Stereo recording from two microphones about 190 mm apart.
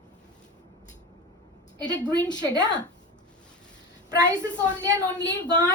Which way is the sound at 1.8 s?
20° left (ahead or behind).